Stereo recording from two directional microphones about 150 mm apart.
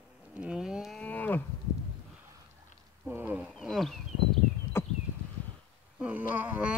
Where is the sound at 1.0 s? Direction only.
10° left (ahead or behind).